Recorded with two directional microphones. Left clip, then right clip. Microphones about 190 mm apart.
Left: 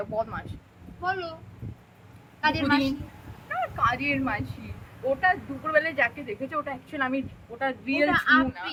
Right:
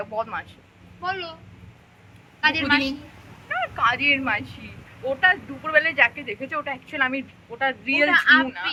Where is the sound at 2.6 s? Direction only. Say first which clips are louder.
Right 3 dB; 5° left (ahead or behind).